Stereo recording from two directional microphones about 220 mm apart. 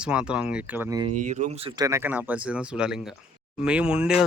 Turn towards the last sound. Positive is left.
turn(degrees=-5)  # may be behind; listen again after turning